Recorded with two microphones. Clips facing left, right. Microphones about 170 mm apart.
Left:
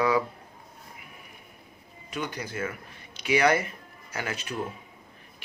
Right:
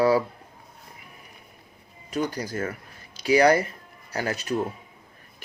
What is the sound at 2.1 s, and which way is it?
Speech, 35° right (ahead or behind).